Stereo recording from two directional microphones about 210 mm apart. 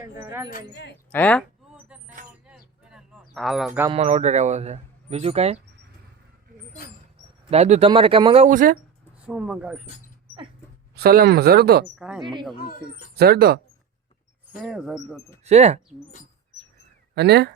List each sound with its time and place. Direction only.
0.0 s speech: 10° right (ahead or behind)
0.7 s speech: 55° left (ahead or behind)
1.1 s speech: 5° left (ahead or behind)
2.5 s a sound: centre (ahead or behind)
3.8 s speech: 30° right (ahead or behind)
7.5 s speech: 30° right (ahead or behind)
9.2 s speech: 5° right (ahead or behind)
10.9 s speech: 45° right (ahead or behind)
11.9 s speech: 5° right (ahead or behind)
12.2 s speech: 20° right (ahead or behind)
13.1 s speech: 50° right (ahead or behind)
14.5 s speech: 5° right (ahead or behind)
15.4 s speech: 30° right (ahead or behind)
17.2 s speech: 50° right (ahead or behind)